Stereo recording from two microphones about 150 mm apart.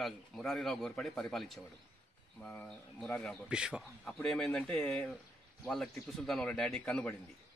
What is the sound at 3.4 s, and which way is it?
Speech, 5° right (ahead or behind).